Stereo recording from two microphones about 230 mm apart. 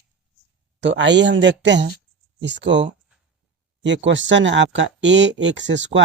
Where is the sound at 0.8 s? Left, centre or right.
Right.